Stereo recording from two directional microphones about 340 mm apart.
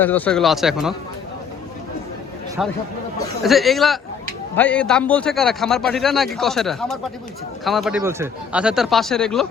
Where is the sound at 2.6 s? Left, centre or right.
Centre.